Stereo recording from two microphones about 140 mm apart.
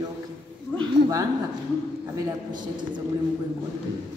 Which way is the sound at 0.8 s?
25° right (ahead or behind).